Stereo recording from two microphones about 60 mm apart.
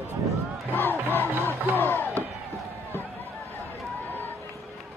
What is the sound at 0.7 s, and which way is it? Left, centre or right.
Speech, left.